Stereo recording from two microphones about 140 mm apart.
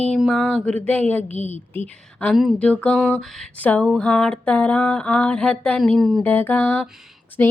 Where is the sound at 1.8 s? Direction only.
10° left (ahead or behind).